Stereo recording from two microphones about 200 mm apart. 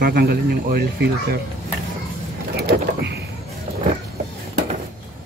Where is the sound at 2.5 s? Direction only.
55° right (ahead or behind).